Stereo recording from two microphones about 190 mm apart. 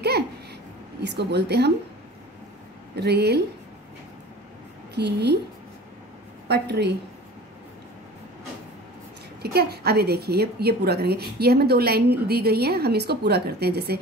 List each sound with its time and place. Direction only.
1.0 s a woman's voice: 60° right (ahead or behind)
3.0 s a woman's voice: 60° right (ahead or behind)
4.9 s a woman's voice: 60° right (ahead or behind)
6.4 s a woman's voice: 60° right (ahead or behind)
9.4 s a woman's voice: 55° right (ahead or behind)